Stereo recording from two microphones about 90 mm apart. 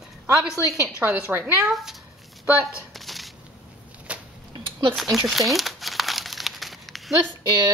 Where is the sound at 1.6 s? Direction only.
5° right (ahead or behind).